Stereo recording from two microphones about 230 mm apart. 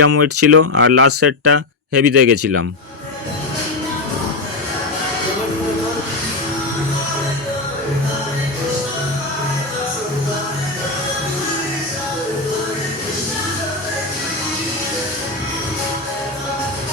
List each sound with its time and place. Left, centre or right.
0.0 s speech: right